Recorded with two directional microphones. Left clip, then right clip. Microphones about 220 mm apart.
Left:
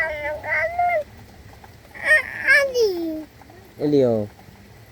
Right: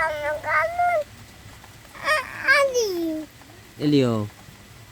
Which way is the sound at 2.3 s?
10° right (ahead or behind).